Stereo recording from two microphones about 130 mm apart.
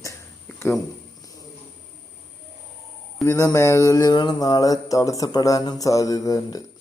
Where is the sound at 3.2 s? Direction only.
25° left (ahead or behind).